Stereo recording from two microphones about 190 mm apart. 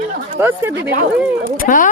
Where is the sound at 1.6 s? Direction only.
45° left (ahead or behind).